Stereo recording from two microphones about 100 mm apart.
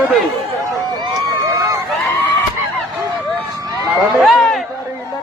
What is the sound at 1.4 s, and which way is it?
Run, 35° right (ahead or behind).